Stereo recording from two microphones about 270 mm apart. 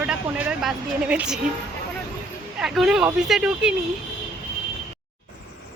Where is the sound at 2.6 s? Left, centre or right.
Centre.